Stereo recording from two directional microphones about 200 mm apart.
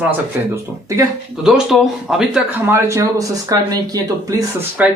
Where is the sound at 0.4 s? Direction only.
10° right (ahead or behind).